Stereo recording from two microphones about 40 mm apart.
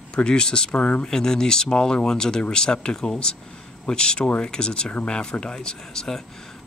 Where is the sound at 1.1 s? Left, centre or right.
Centre.